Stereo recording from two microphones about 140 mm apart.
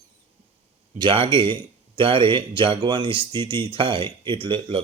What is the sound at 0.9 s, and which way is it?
Speech, 35° right (ahead or behind).